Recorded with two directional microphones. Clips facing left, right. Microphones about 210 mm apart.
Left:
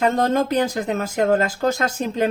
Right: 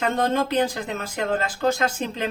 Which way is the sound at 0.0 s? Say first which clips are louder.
Left 4 dB; 40° left (ahead or behind).